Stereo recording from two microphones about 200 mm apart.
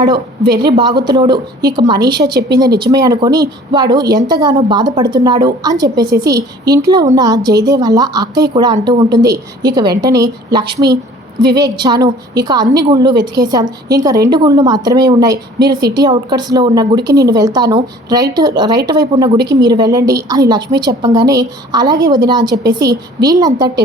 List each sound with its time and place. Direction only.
0.5 s a woman's voice: 20° right (ahead or behind)
2.2 s speech: 50° right (ahead or behind)
2.6 s a woman's voice: 20° right (ahead or behind)